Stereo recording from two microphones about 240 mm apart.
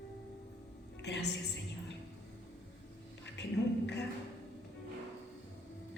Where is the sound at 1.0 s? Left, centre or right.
Left.